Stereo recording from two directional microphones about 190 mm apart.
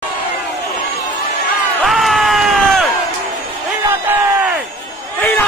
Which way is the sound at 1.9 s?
Centre (ahead or behind).